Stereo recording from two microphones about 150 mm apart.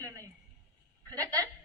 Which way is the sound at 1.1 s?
25° right (ahead or behind).